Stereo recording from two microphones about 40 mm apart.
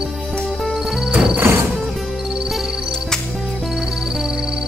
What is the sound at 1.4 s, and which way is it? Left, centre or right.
Music, right.